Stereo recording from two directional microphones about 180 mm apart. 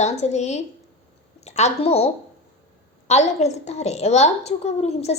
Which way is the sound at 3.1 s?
40° left (ahead or behind).